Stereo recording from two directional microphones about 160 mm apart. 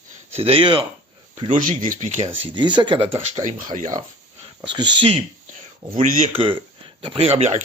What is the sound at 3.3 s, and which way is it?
Speech, 55° right (ahead or behind).